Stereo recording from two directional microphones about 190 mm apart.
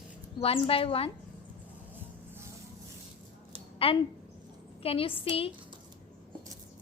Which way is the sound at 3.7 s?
30° left (ahead or behind).